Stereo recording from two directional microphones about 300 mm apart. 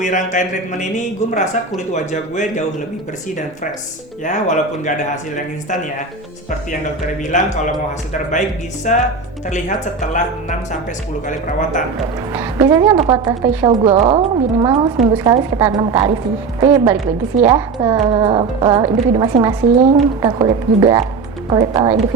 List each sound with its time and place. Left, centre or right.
0.0 s speech: left
1.9 s speech: left
4.2 s speech: left
7.3 s speech: left
12.3 s speech: centre